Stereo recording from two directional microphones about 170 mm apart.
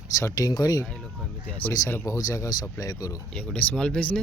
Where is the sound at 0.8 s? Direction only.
5° left (ahead or behind); by 3.1 s 20° left (ahead or behind).